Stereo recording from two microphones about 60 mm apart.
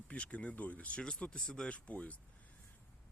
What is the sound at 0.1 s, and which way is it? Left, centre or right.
Speech, left.